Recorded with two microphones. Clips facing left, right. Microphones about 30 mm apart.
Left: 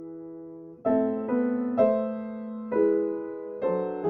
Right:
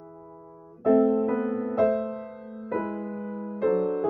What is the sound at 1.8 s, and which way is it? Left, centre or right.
Music, centre.